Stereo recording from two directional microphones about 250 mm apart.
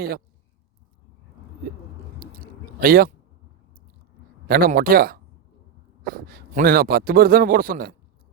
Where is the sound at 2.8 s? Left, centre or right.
Right.